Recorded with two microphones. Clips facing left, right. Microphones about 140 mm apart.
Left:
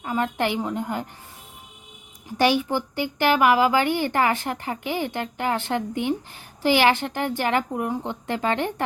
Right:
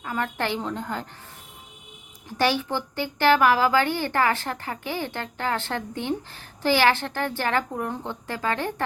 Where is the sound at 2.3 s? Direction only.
15° left (ahead or behind).